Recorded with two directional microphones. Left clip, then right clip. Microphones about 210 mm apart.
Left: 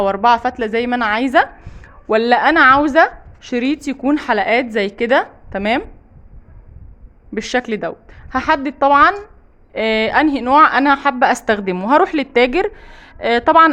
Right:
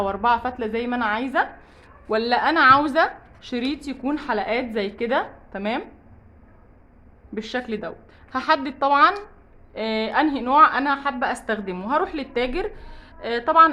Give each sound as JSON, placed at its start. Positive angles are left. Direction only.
{"t": 0.0, "sound": "a woman's voice", "side_deg": 35}
{"t": 7.3, "sound": "a woman's voice", "side_deg": 40}